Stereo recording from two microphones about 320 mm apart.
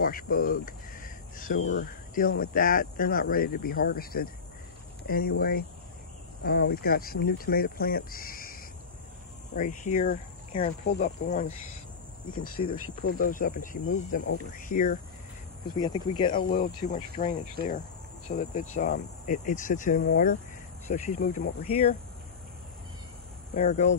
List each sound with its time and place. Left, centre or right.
0.0 s a sound: left
1.6 s speech: left
9.6 s speech: left
12.6 s speech: left
13.0 s speech: left
16.4 s speech: left
23.5 s speech: left